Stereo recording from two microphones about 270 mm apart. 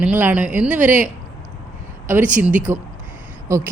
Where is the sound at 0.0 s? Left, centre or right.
Centre.